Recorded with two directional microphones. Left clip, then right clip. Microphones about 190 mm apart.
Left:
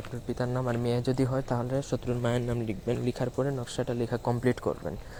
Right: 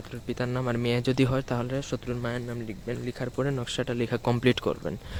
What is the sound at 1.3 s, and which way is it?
Speech, 30° right (ahead or behind).